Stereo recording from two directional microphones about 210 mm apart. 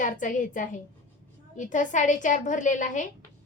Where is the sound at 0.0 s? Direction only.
40° left (ahead or behind).